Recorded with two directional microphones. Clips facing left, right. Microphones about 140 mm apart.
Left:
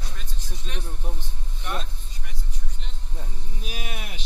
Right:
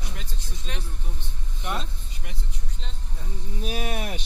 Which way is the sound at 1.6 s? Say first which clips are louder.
Right 1 dB; 25° right (ahead or behind).